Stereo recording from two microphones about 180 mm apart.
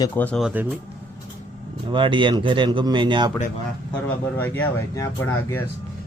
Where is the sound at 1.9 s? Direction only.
25° right (ahead or behind).